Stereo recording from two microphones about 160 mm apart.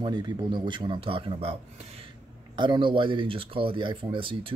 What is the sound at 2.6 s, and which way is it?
Speech, 30° right (ahead or behind).